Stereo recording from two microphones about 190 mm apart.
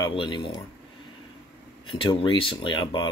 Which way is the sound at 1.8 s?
25° left (ahead or behind).